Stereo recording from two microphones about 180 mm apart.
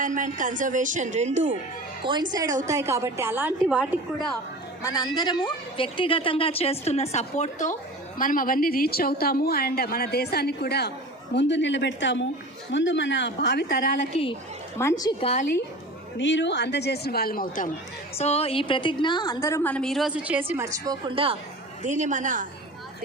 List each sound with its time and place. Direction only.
0.0 s speech: 45° right (ahead or behind)
2.3 s a woman's voice: 20° right (ahead or behind); by 4.3 s 5° right (ahead or behind)
4.8 s a woman's voice: 20° left (ahead or behind); by 10.9 s 65° left (ahead or behind)
11.3 s a woman's voice: 75° left (ahead or behind)
14.8 s a woman's voice: 15° left (ahead or behind)
15.2 s a woman's voice: 35° left (ahead or behind)
16.1 s a woman's voice: 90° left; by 17.7 s 50° left (ahead or behind)
18.2 s a woman's voice: 35° left (ahead or behind); by 20.4 s 5° right (ahead or behind)
20.6 s speech: 20° right (ahead or behind)
21.8 s speech: 40° right (ahead or behind)